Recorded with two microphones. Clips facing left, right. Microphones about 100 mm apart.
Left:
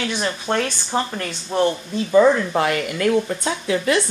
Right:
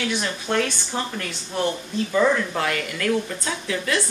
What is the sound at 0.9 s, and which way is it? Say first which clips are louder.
Speech: left 7 dB; 50° left (ahead or behind).